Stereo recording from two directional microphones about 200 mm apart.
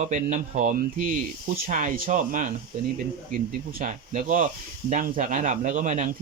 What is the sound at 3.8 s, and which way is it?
Speech, 40° right (ahead or behind).